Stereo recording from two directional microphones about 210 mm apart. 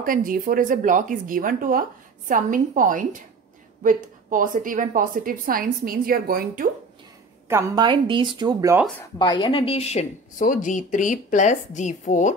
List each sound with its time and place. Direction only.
0.0 s speech: 40° right (ahead or behind)
7.4 s speech: 15° right (ahead or behind)
9.2 s a woman's voice: 20° left (ahead or behind)